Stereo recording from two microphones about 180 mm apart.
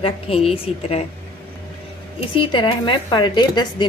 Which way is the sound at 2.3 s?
25° left (ahead or behind).